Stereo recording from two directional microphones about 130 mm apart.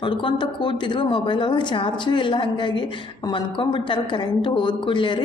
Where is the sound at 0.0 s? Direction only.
40° left (ahead or behind).